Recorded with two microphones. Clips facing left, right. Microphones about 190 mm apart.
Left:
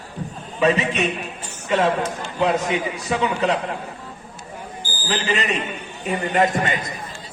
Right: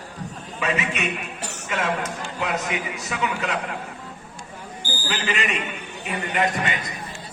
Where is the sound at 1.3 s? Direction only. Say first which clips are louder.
Right 2 dB; 75° right (ahead or behind).